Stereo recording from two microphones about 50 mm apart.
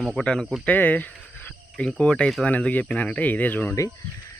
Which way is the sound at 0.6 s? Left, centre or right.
Left.